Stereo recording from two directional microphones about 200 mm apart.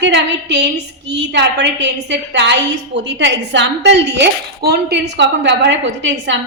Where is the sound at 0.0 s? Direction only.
60° right (ahead or behind).